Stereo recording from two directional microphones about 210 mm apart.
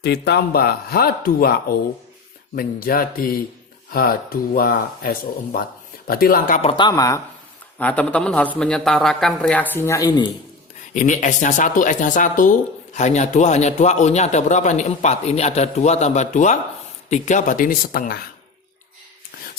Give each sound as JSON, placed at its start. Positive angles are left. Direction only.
{"t": 0.0, "sound": "speech", "side_deg": 55}
{"t": 2.6, "sound": "speech", "side_deg": 45}
{"t": 6.6, "sound": "a man's voice", "side_deg": 25}
{"t": 10.9, "sound": "speech", "side_deg": 35}